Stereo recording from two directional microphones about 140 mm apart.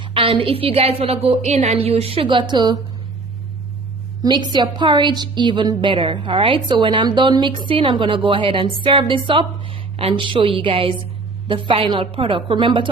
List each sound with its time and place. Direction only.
0.0 s a woman's voice: 40° right (ahead or behind)
4.2 s a woman's voice: 30° right (ahead or behind)